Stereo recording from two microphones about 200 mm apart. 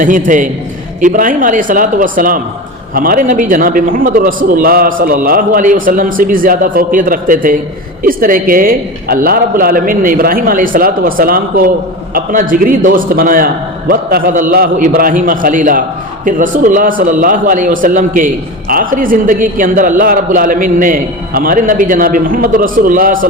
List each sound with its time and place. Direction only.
0.3 s a man's voice: 40° right (ahead or behind)